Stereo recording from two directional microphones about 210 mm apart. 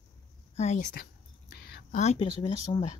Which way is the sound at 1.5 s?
50° left (ahead or behind).